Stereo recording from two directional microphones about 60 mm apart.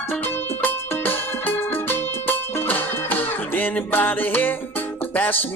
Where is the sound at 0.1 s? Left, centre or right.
Left.